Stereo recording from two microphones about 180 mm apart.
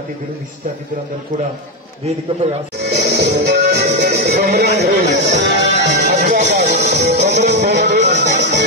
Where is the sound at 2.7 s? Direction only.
65° right (ahead or behind).